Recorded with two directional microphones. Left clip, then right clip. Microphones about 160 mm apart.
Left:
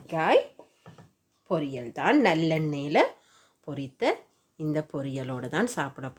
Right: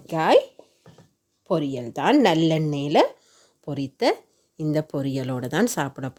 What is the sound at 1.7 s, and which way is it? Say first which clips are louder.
Speech: right 3 dB; 65° right (ahead or behind).